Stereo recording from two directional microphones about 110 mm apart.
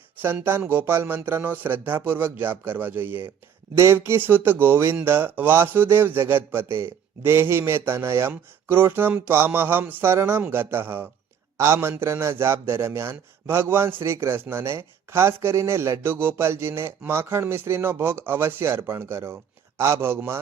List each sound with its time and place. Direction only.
0.2 s a man's voice: 20° right (ahead or behind)